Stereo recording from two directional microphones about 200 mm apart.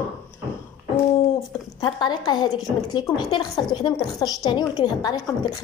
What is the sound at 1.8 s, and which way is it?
A woman's voice, 20° left (ahead or behind).